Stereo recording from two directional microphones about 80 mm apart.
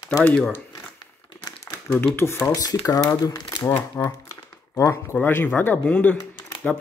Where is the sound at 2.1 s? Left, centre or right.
Left.